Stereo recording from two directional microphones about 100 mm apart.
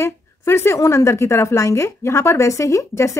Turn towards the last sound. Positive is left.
turn(degrees=30)  # may be behind; listen again after turning